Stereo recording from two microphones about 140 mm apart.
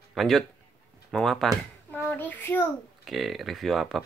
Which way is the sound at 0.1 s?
Centre (ahead or behind).